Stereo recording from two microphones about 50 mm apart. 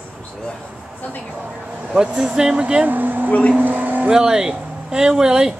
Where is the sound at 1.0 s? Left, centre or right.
Left.